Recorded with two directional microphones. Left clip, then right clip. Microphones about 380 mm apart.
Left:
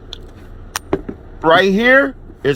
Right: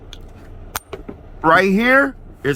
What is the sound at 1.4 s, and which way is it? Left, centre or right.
Speech, centre.